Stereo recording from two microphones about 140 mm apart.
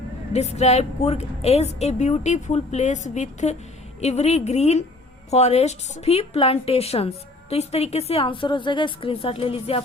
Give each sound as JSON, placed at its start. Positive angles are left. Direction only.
{"t": 0.3, "sound": "a woman's voice", "side_deg": 50}